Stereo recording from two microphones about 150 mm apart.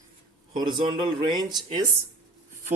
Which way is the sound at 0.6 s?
30° right (ahead or behind).